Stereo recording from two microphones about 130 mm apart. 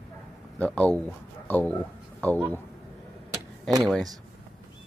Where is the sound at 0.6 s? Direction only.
10° left (ahead or behind).